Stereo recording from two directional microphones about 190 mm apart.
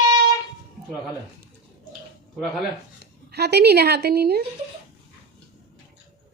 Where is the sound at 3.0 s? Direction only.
60° right (ahead or behind).